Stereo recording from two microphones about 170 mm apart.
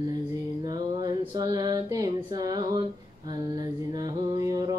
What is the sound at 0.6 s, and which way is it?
Mantra, 25° right (ahead or behind).